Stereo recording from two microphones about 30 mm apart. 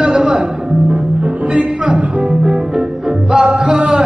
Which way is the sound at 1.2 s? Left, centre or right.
Right.